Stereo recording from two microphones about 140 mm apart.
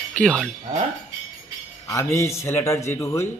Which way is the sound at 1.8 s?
25° left (ahead or behind).